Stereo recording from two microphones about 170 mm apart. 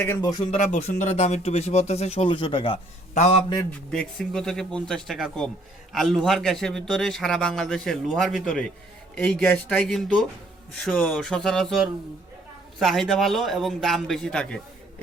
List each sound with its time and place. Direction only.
0.0 s speech: 20° left (ahead or behind)
0.5 s speech: 40° left (ahead or behind)
3.7 s a man's voice: 5° left (ahead or behind)